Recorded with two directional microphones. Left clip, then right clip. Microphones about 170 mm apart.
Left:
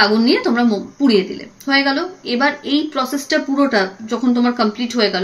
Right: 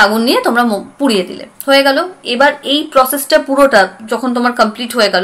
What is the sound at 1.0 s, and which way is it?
Speech, 50° right (ahead or behind).